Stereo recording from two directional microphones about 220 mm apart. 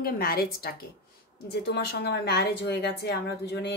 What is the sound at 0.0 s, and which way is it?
A woman's voice, 45° left (ahead or behind).